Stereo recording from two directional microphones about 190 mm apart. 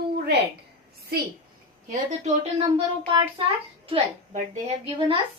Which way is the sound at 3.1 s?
25° right (ahead or behind).